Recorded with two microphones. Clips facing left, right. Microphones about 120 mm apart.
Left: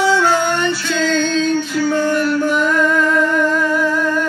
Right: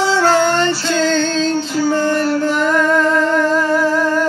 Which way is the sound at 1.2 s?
30° right (ahead or behind).